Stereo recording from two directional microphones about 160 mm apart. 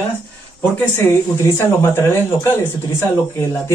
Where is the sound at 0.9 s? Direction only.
15° left (ahead or behind).